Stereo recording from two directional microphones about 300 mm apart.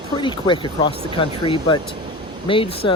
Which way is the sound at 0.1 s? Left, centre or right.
Centre.